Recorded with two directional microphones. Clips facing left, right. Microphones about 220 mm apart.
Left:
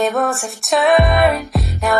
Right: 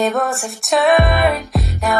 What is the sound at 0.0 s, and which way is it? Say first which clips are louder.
Music: even; centre (ahead or behind).